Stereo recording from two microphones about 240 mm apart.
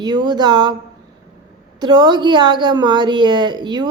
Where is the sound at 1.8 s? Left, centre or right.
Centre.